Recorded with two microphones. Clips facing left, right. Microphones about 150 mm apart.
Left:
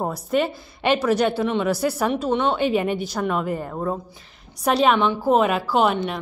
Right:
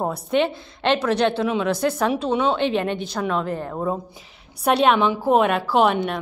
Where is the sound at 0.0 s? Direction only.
Centre (ahead or behind).